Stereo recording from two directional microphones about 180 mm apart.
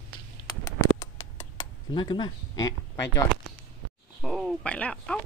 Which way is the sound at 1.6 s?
25° left (ahead or behind).